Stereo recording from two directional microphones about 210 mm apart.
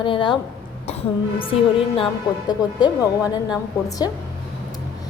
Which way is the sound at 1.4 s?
25° left (ahead or behind).